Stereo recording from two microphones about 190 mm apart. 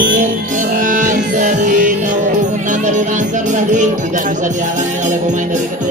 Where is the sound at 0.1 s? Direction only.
45° right (ahead or behind).